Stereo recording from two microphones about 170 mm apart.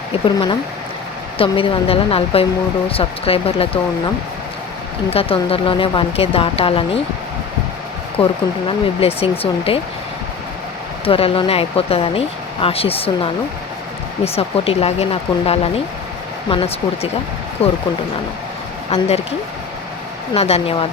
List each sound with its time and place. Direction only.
0.3 s speech: 30° left (ahead or behind)
5.1 s speech: 35° left (ahead or behind)
8.6 s speech: 35° left (ahead or behind)
11.0 s speech: 35° left (ahead or behind)
14.3 s speech: 35° left (ahead or behind)
18.9 s speech: 35° left (ahead or behind)
20.3 s speech: 35° left (ahead or behind)